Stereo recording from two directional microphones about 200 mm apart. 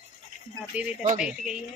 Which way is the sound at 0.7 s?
10° right (ahead or behind).